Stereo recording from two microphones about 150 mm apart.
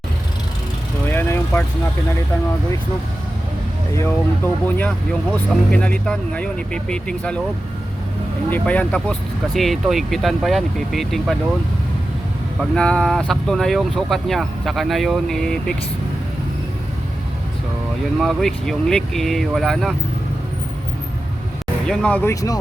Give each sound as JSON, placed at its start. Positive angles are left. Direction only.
{"t": 1.0, "sound": "vehicle", "side_deg": 15}
{"t": 3.9, "sound": "speech", "side_deg": 15}
{"t": 8.4, "sound": "speech", "side_deg": 10}
{"t": 12.5, "sound": "speech", "side_deg": 5}
{"t": 18.2, "sound": "speech", "side_deg": 0}
{"t": 21.8, "sound": "speech", "side_deg": 10}